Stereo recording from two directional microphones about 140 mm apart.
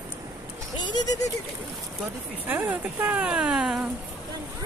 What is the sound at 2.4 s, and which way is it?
Speech, 15° right (ahead or behind).